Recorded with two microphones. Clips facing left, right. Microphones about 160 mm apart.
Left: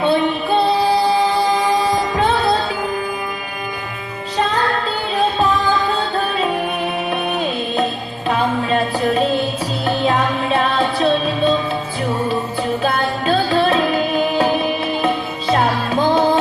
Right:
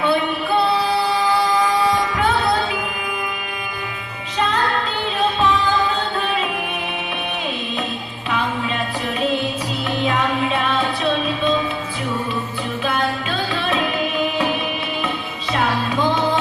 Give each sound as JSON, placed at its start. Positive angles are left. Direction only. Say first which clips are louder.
{"t": 0.0, "sound": "music", "louder": "left 3 dB", "side_deg": 25}
{"t": 8.3, "sound": "music", "louder": "left 5 dB", "side_deg": 40}
{"t": 12.8, "sound": "music", "louder": "left 3 dB", "side_deg": 40}